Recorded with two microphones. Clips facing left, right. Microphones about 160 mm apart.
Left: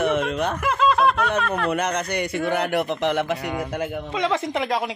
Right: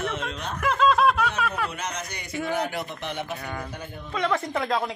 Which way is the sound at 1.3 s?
5° right (ahead or behind).